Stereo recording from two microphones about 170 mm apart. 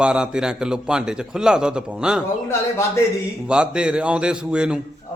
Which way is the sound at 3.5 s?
5° right (ahead or behind).